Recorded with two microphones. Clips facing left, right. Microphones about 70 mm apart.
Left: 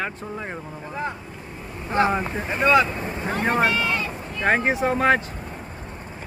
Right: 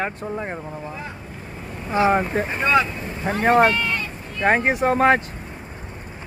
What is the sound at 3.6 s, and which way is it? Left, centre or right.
Vehicle, centre.